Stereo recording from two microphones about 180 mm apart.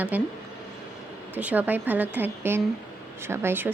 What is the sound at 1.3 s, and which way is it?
Speech, 10° right (ahead or behind).